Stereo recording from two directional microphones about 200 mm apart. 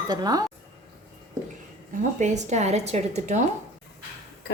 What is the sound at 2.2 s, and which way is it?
A woman's voice, 35° right (ahead or behind).